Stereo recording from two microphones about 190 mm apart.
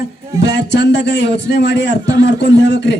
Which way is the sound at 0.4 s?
65° left (ahead or behind).